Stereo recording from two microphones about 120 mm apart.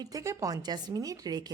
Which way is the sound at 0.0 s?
30° right (ahead or behind).